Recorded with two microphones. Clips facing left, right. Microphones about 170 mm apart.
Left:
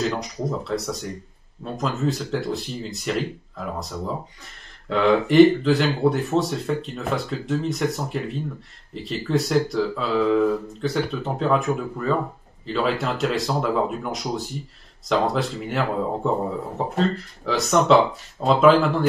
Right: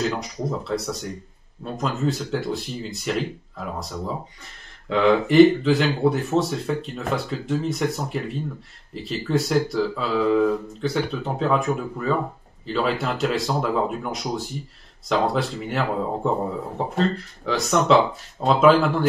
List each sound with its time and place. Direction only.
0.0 s speech: centre (ahead or behind)